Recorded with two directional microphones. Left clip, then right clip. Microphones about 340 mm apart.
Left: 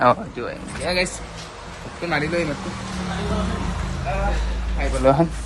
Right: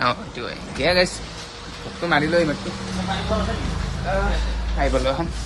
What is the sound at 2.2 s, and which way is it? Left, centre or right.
Speech, right.